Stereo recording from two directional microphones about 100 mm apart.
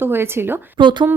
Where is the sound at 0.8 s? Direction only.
50° right (ahead or behind).